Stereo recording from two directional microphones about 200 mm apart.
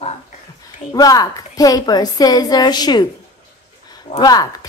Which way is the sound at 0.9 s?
20° left (ahead or behind).